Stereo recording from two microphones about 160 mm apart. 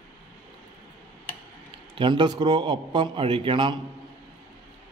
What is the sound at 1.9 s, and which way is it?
A man's voice, 30° right (ahead or behind).